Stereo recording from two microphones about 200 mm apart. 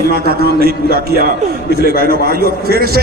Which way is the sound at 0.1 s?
50° right (ahead or behind).